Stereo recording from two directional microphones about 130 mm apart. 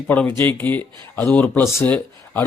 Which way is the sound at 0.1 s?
15° left (ahead or behind).